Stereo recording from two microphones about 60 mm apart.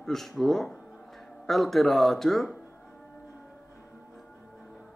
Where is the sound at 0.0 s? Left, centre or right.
Centre.